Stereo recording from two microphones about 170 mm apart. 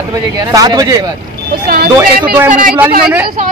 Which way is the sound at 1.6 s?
65° right (ahead or behind).